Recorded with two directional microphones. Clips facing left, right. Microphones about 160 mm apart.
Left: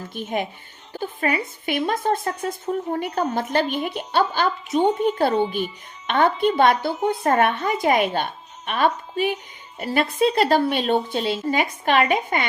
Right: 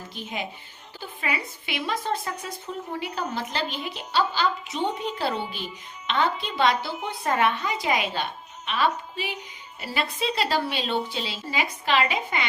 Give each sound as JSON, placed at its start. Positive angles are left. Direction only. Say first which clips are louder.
{"t": 0.1, "sound": "a woman's voice", "louder": "left 8 dB", "side_deg": 50}